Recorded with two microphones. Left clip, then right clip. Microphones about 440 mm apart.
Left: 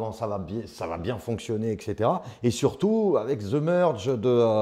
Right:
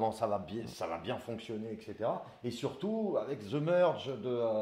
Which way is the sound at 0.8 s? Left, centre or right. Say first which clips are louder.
Left 6 dB; left.